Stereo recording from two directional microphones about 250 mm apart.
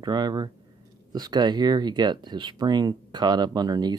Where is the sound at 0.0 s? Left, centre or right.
Centre.